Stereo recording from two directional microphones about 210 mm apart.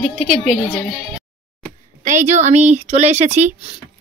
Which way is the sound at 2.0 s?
35° right (ahead or behind).